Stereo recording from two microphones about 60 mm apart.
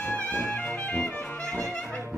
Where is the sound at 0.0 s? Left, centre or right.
Left.